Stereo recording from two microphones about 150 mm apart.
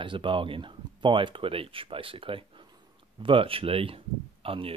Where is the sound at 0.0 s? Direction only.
35° right (ahead or behind).